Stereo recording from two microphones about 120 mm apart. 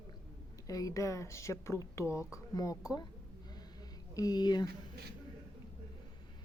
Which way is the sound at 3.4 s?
35° left (ahead or behind).